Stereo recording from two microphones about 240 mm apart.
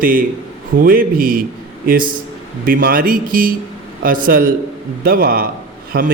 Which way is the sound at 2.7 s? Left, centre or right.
Right.